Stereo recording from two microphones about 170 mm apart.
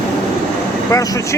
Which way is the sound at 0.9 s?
20° left (ahead or behind).